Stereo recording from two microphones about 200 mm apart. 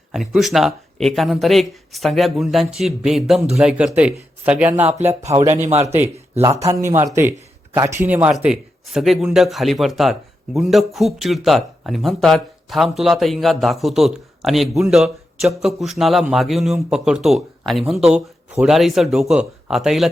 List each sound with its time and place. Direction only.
0.1 s speech: centre (ahead or behind)
5.2 s speech: 35° right (ahead or behind)
5.8 s speech: 10° right (ahead or behind)